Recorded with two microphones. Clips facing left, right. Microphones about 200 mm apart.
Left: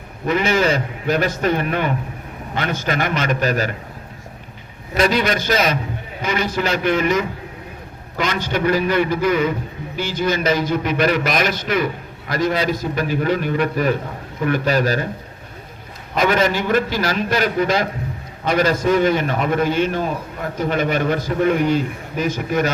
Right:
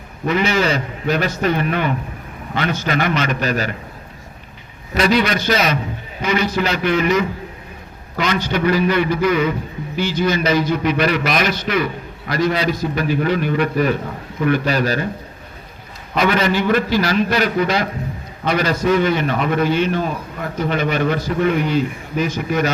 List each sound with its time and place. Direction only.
0.3 s a man's voice: 50° left (ahead or behind)
4.9 s a man's voice: 45° left (ahead or behind)
16.1 s a man's voice: 45° left (ahead or behind)